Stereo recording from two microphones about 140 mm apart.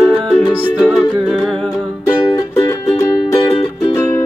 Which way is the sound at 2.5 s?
20° left (ahead or behind).